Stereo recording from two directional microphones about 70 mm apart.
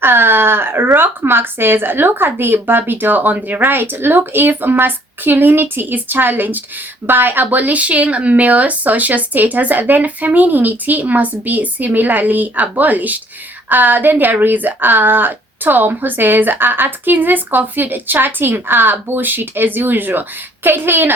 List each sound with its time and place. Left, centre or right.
0.0 s speech: right